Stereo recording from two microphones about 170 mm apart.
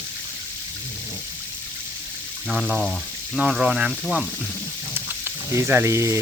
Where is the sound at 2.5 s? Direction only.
Centre (ahead or behind).